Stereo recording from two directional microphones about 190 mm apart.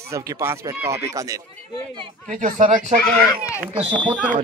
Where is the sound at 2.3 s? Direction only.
40° right (ahead or behind).